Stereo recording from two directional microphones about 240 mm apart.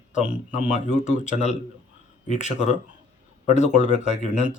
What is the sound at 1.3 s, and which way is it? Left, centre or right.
Speech, left.